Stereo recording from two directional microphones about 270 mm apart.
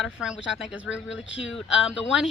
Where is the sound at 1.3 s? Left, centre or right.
Left.